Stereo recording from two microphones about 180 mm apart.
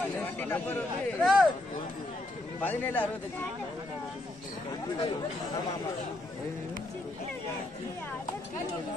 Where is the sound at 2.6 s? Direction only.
10° left (ahead or behind).